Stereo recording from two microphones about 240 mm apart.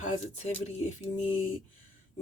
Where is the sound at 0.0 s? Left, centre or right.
Left.